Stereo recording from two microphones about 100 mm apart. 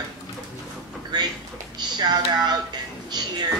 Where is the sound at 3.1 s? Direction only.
45° right (ahead or behind).